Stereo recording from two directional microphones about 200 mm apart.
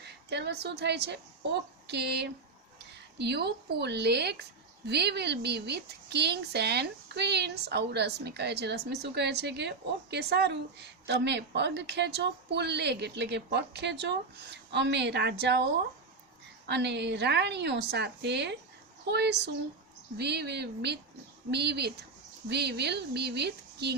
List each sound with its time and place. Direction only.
0.0 s a woman's voice: 55° right (ahead or behind)